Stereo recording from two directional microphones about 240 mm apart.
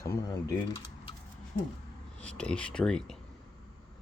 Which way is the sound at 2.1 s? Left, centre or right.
Centre.